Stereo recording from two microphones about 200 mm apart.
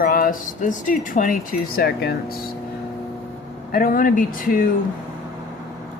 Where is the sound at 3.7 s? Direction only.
45° left (ahead or behind).